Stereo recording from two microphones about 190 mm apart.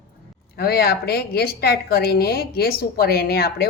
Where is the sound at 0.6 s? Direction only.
55° left (ahead or behind).